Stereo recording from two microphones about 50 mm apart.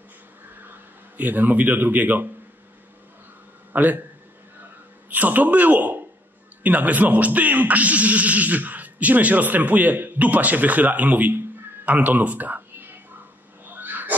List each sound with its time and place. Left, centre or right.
1.1 s speech: right
3.7 s speech: right
5.1 s speech: right
13.7 s a sound: right